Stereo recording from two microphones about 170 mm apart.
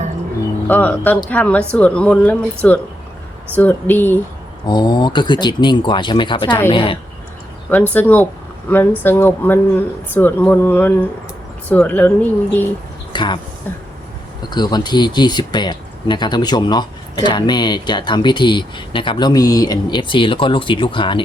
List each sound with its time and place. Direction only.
0.7 s a woman's voice: 10° left (ahead or behind)
4.6 s a woman's voice: 25° left (ahead or behind)
7.9 s a woman's voice: 10° left (ahead or behind)
13.1 s speech: 25° left (ahead or behind)
13.7 s a woman's voice: 10° left (ahead or behind)
14.5 s speech: 25° left (ahead or behind)